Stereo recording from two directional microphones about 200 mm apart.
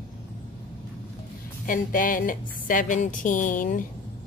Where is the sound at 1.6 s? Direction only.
45° left (ahead or behind).